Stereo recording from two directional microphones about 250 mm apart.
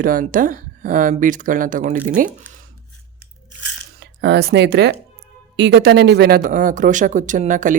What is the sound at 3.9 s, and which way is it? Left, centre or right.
Speech, right.